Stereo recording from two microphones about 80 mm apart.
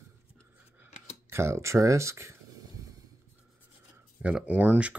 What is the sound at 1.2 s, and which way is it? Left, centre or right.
Speech, right.